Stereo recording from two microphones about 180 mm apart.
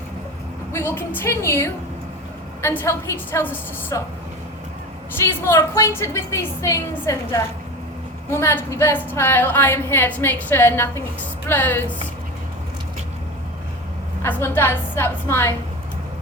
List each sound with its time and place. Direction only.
0.7 s a woman's voice: 10° left (ahead or behind)
5.2 s a woman's voice: 15° left (ahead or behind)
14.2 s a woman's voice: 10° left (ahead or behind)